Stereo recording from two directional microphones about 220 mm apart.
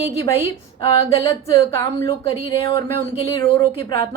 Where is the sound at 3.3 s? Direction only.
20° left (ahead or behind).